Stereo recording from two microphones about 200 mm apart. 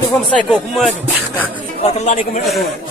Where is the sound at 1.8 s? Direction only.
35° left (ahead or behind).